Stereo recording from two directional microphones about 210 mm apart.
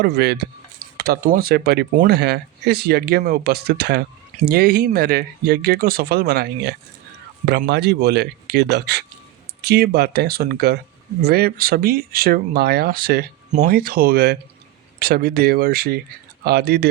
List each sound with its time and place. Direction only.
0.0 s speech: 50° right (ahead or behind)